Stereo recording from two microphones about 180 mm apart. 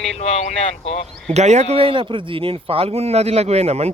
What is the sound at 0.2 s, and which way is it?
Speech, 35° left (ahead or behind).